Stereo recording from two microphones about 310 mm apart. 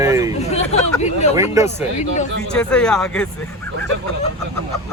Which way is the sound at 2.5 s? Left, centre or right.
Centre.